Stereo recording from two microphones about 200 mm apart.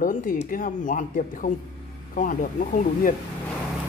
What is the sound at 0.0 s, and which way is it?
Speech, 45° left (ahead or behind).